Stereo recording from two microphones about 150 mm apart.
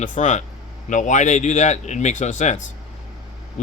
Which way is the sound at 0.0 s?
55° left (ahead or behind).